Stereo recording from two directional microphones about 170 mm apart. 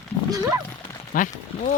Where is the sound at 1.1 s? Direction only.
50° left (ahead or behind).